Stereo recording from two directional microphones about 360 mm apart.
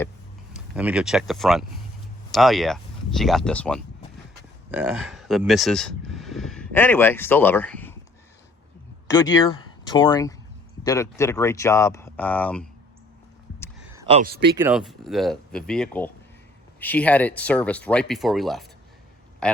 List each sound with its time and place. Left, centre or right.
0.5 s speech: centre
9.0 s speech: centre
13.9 s speech: centre
14.5 s a man's voice: centre